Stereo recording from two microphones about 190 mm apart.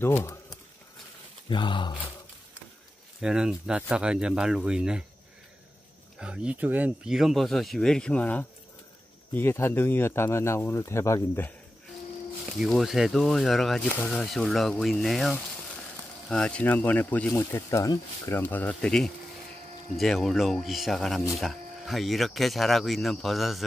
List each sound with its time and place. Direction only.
0.0 s speech: 10° left (ahead or behind)
1.5 s speech: 25° left (ahead or behind)
3.2 s speech: 5° right (ahead or behind)
6.1 s speech: 5° right (ahead or behind); by 11.5 s 10° left (ahead or behind)
12.5 s speech: centre (ahead or behind)